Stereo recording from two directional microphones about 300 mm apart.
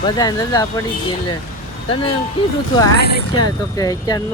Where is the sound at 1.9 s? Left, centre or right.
Centre.